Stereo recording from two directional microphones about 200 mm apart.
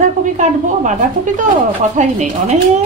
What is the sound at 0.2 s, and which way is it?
A woman's voice, 40° right (ahead or behind).